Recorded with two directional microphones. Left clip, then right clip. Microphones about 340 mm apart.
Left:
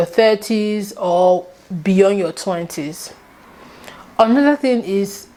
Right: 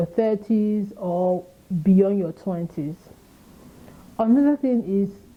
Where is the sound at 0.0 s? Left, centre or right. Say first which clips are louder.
Left 9 dB; centre.